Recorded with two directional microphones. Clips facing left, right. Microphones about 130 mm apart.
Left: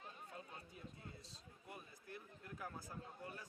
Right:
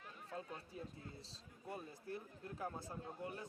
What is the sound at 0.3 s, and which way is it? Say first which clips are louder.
Speech: right 6 dB; 30° right (ahead or behind).